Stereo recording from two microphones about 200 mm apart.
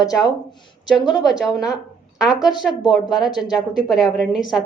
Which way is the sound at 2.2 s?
Centre (ahead or behind).